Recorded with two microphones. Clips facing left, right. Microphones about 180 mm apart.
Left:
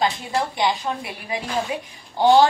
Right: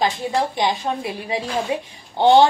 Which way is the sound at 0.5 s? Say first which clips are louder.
Right 1 dB; 20° right (ahead or behind).